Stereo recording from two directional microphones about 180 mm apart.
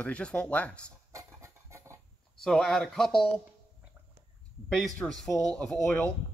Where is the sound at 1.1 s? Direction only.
15° right (ahead or behind).